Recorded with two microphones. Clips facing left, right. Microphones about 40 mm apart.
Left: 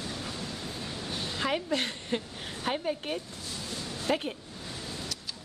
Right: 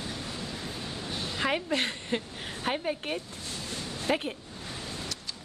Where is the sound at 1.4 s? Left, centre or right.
Centre.